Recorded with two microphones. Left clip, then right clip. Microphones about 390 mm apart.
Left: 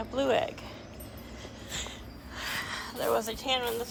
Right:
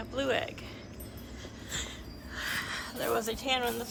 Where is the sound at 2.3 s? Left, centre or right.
Centre.